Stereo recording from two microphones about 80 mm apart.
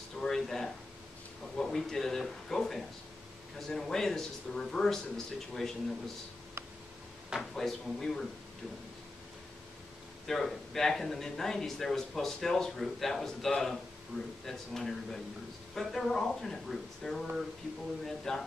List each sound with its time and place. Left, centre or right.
0.2 s a sound: centre
1.6 s speech: centre
7.3 s speech: centre
10.2 s speech: centre